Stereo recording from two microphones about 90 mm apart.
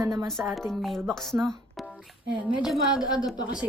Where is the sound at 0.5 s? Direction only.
Centre (ahead or behind).